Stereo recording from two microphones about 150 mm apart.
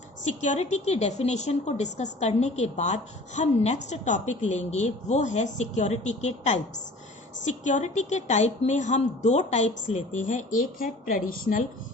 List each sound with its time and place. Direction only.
0.3 s a woman's voice: 55° left (ahead or behind)